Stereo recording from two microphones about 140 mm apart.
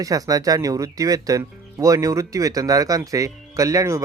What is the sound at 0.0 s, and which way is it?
Speech, 25° right (ahead or behind).